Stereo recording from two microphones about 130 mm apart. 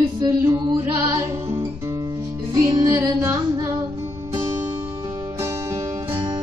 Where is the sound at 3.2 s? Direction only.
20° right (ahead or behind).